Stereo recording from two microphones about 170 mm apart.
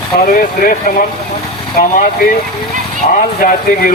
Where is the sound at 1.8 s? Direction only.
55° left (ahead or behind).